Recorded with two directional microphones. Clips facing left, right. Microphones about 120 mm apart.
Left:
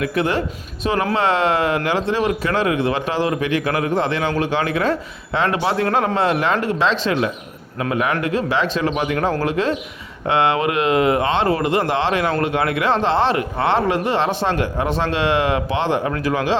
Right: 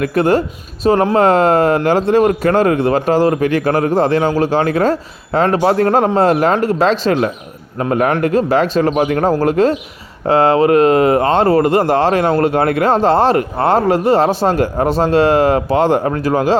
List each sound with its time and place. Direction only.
0.0 s speech: 45° right (ahead or behind)